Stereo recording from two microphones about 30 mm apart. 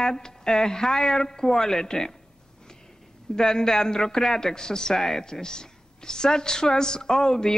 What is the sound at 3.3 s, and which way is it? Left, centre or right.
A woman's voice, centre.